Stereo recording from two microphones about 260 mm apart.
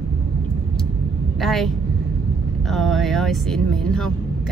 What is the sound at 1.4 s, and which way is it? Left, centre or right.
Speech, centre.